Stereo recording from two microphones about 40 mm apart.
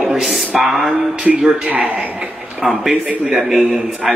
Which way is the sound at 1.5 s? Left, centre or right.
Right.